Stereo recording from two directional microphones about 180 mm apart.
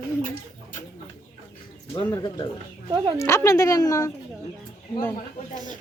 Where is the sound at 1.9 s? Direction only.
25° left (ahead or behind).